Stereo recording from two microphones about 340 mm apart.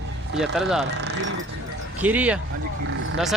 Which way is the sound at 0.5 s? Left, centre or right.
Centre.